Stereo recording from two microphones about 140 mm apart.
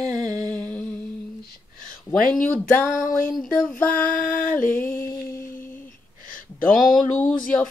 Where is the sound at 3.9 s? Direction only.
80° left.